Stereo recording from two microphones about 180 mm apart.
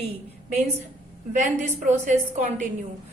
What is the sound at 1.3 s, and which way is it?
A woman's voice, 40° right (ahead or behind).